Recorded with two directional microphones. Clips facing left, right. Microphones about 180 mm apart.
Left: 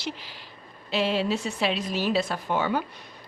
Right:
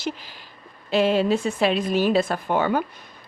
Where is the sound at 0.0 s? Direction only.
45° right (ahead or behind).